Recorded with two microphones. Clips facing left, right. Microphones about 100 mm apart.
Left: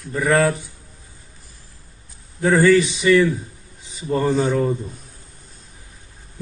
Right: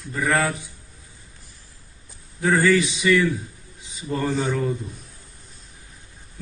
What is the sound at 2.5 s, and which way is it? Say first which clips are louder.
A man's voice: left 5 dB; 25° left (ahead or behind).